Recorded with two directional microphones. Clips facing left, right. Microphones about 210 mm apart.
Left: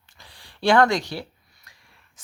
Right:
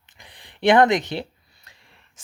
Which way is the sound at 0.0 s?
20° right (ahead or behind).